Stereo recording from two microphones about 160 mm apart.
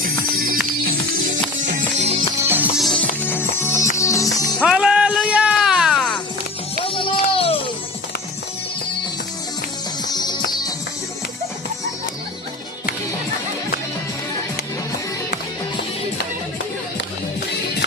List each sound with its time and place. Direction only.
0.0 s music: 65° right (ahead or behind)
1.5 s music: 50° right (ahead or behind)
2.4 s music: 15° right (ahead or behind)
2.7 s music: 5° left (ahead or behind)
3.2 s music: 15° left (ahead or behind)
4.6 s music: 5° right (ahead or behind)
6.8 s a sound: 35° left (ahead or behind)
10.1 s music: 25° left (ahead or behind)